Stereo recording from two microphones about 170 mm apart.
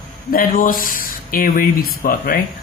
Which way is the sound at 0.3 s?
55° left (ahead or behind).